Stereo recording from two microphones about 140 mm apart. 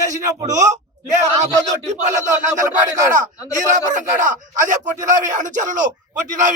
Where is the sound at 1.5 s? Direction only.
25° right (ahead or behind).